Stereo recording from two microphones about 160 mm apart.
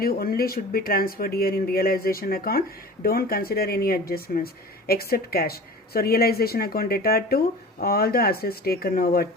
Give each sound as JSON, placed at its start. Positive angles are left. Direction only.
{"t": 0.0, "sound": "speech", "side_deg": 70}